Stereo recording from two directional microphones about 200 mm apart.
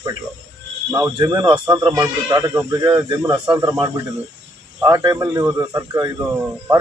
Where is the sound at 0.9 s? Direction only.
15° right (ahead or behind).